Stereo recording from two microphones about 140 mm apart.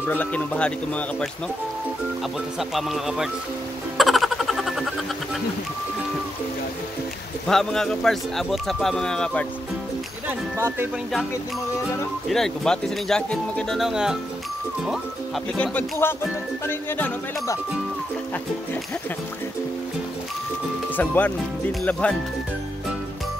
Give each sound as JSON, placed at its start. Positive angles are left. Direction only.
{"t": 0.0, "sound": "speech", "side_deg": 15}
{"t": 2.7, "sound": "speech", "side_deg": -5}
{"t": 4.0, "sound": "a sound", "side_deg": 0}
{"t": 7.4, "sound": "speech", "side_deg": 5}
{"t": 10.2, "sound": "speech", "side_deg": -15}
{"t": 12.3, "sound": "speech", "side_deg": 0}
{"t": 20.9, "sound": "speech", "side_deg": 10}